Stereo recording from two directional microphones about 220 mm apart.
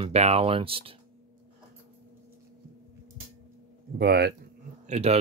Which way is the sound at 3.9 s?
50° right (ahead or behind).